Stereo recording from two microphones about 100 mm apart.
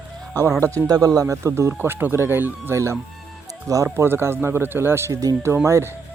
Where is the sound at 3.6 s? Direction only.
35° right (ahead or behind).